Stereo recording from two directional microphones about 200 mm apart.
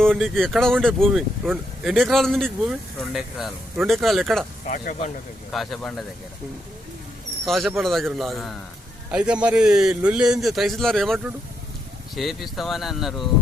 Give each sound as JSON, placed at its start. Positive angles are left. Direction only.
{"t": 0.0, "sound": "speech", "side_deg": 0}
{"t": 4.6, "sound": "speech", "side_deg": 35}
{"t": 5.5, "sound": "speech", "side_deg": 0}
{"t": 7.4, "sound": "speech", "side_deg": 0}